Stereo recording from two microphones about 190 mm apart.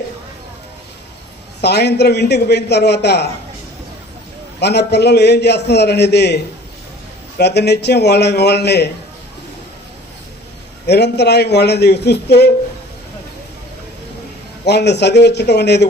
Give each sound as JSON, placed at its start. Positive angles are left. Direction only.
{"t": 1.6, "sound": "a man's voice", "side_deg": 60}
{"t": 4.6, "sound": "a man's voice", "side_deg": 60}
{"t": 10.8, "sound": "a man's voice", "side_deg": 60}
{"t": 14.7, "sound": "a man's voice", "side_deg": 60}